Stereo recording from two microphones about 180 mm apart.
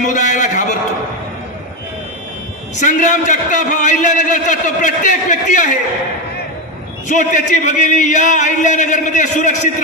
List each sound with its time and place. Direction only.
0.0 s a sound: 45° left (ahead or behind)
2.8 s a man's voice: 45° left (ahead or behind)
7.1 s a man's voice: 45° left (ahead or behind)